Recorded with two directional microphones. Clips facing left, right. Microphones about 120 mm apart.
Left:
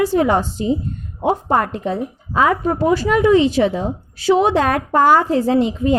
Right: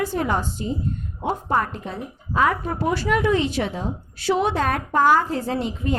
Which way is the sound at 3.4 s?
90° left.